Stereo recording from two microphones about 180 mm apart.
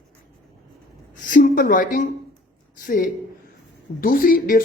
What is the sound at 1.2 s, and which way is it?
Speech, 50° left (ahead or behind).